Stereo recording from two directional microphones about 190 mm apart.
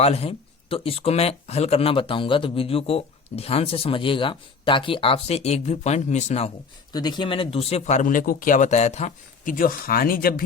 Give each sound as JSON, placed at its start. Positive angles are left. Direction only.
{"t": 0.0, "sound": "speech", "side_deg": 30}
{"t": 6.9, "sound": "speech", "side_deg": 20}